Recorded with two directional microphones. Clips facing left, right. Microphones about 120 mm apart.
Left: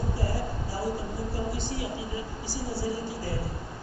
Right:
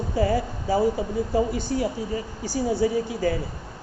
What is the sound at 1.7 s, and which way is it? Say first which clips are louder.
Speech: right 9 dB; 55° right (ahead or behind).